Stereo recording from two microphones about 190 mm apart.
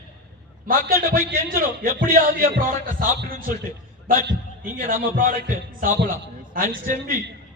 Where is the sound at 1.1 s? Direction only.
50° right (ahead or behind).